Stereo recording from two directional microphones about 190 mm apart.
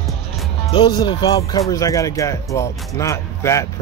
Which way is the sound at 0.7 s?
25° left (ahead or behind).